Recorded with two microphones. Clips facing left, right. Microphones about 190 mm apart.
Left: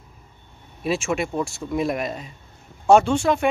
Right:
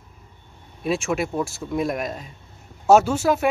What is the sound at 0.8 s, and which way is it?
Speech, centre (ahead or behind).